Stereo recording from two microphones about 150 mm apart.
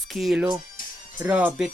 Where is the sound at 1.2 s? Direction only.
10° right (ahead or behind).